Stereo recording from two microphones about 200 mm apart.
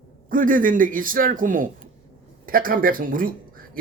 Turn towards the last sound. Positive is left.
turn(degrees=-45)  # may be behind; listen again after turning